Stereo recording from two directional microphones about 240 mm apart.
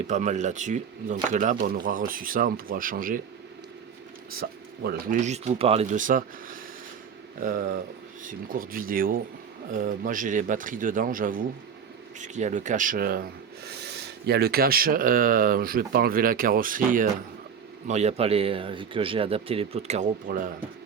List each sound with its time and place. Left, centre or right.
0.1 s speech: right
4.3 s speech: right